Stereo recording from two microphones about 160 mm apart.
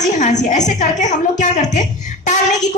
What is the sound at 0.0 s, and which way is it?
A woman's voice, 50° left (ahead or behind).